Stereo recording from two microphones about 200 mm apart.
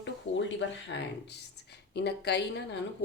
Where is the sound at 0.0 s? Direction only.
65° left (ahead or behind).